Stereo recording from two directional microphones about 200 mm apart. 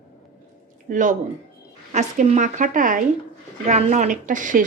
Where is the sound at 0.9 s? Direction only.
40° right (ahead or behind).